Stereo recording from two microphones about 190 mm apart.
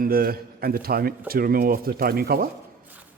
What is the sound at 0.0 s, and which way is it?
Speech, 50° right (ahead or behind).